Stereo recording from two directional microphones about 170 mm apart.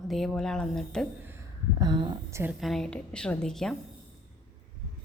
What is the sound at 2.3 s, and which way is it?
Speech, 15° right (ahead or behind).